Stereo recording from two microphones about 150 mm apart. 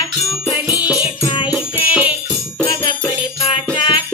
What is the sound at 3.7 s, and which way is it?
Music, 30° left (ahead or behind).